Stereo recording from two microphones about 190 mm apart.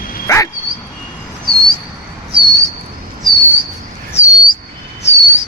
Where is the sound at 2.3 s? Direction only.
25° right (ahead or behind).